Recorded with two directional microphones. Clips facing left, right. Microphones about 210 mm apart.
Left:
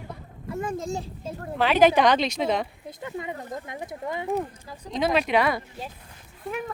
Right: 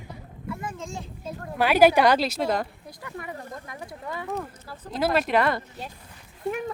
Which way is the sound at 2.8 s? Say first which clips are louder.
Left 4 dB; 20° left (ahead or behind).